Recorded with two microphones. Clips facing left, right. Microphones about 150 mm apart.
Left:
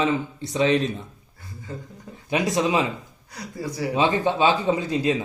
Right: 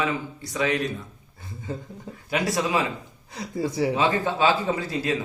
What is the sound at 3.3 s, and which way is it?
Speech, 25° right (ahead or behind).